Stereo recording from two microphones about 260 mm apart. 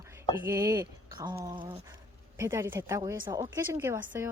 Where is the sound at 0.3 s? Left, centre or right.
Centre.